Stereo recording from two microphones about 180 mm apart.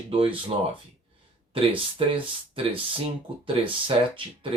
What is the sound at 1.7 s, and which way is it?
Speech, 30° right (ahead or behind).